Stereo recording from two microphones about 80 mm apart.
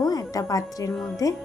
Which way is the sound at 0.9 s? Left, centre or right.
Centre.